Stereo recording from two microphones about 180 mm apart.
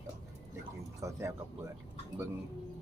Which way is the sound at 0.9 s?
15° right (ahead or behind).